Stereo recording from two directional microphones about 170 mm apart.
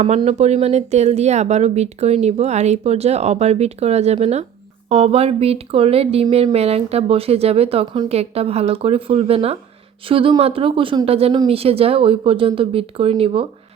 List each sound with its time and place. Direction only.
0.0 s speech: 40° right (ahead or behind)